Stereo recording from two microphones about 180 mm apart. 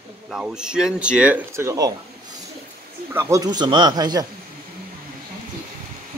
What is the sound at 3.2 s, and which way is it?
Speech, 15° right (ahead or behind).